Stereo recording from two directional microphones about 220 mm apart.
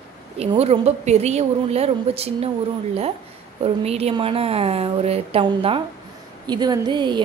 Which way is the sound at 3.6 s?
25° right (ahead or behind).